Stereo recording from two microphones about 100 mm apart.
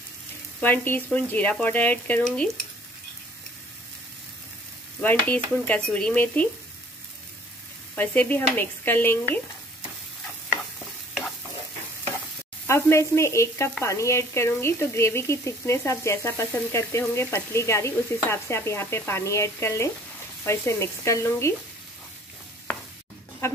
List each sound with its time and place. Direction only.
0.6 s speech: 15° left (ahead or behind)
5.0 s speech: 15° left (ahead or behind)
7.9 s speech: 15° left (ahead or behind)
12.6 s speech: 30° left (ahead or behind)
23.4 s speech: 25° left (ahead or behind)